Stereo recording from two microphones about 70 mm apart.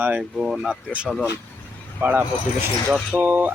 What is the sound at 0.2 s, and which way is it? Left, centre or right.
Speech, centre.